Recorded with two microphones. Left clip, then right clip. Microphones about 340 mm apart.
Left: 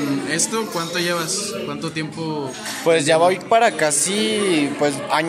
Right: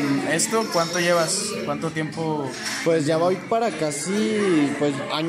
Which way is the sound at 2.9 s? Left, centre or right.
Left.